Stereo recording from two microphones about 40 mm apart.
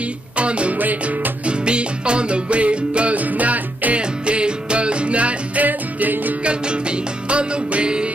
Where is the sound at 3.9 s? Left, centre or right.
Right.